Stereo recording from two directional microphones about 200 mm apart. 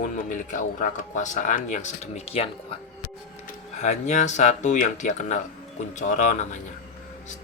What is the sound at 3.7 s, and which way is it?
Speech, 35° left (ahead or behind).